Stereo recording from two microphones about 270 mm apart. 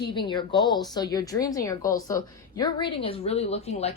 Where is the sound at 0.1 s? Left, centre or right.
Centre.